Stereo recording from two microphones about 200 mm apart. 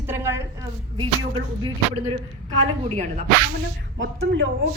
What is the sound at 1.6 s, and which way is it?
A woman's voice, 30° right (ahead or behind).